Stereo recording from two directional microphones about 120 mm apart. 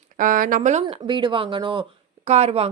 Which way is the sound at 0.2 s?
90° right.